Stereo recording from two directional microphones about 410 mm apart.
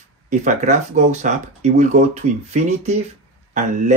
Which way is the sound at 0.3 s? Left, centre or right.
Centre.